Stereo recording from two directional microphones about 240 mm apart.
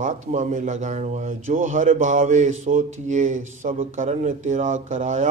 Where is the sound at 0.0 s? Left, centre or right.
Right.